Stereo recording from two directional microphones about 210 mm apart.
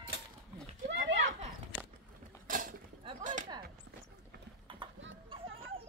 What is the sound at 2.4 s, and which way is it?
Cutlery, 40° right (ahead or behind).